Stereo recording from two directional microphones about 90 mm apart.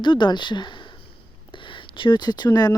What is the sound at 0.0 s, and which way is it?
Speech, 60° left (ahead or behind).